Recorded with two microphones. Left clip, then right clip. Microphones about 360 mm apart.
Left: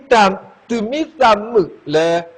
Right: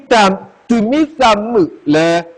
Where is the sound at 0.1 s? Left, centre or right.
Right.